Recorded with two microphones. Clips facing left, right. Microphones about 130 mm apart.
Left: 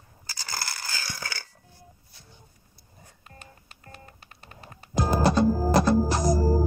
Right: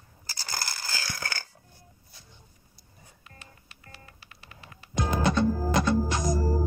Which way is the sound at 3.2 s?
35° left (ahead or behind).